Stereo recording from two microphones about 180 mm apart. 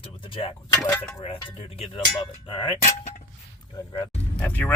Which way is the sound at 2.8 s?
40° left (ahead or behind).